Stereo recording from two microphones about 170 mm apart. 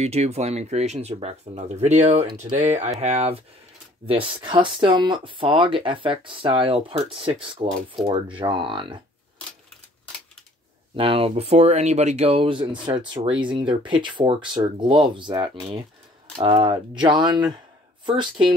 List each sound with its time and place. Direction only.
0.0 s speech: 40° right (ahead or behind)
11.0 s speech: 35° right (ahead or behind)